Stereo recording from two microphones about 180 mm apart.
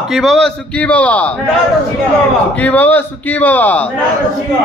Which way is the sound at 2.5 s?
10° left (ahead or behind).